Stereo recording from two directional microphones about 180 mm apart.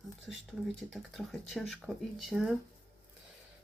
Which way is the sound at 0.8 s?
Centre (ahead or behind).